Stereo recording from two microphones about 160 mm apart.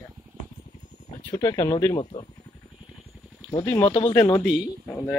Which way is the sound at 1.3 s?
25° left (ahead or behind).